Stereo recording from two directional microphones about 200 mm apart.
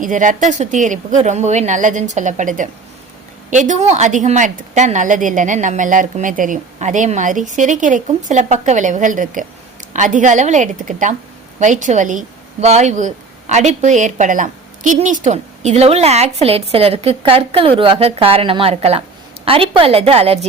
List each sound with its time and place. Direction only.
0.0 s a woman's voice: 40° right (ahead or behind)